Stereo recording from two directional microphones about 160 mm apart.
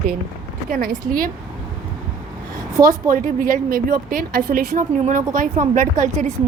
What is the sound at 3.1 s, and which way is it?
A woman's voice, 55° right (ahead or behind).